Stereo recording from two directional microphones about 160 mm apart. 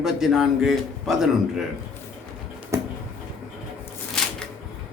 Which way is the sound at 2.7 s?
15° right (ahead or behind).